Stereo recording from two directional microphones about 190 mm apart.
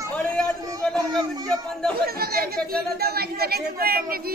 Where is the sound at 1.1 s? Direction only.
20° right (ahead or behind).